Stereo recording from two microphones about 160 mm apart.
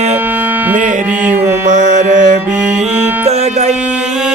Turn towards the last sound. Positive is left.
turn(degrees=-45)  # may be behind; listen again after turning